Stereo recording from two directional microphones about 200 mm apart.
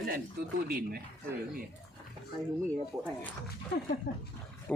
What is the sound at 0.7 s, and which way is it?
Speech, 50° right (ahead or behind).